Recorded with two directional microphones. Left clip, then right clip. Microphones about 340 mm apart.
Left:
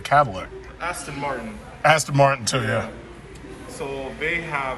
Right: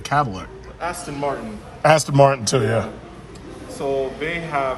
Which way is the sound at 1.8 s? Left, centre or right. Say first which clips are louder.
Right 3 dB; centre.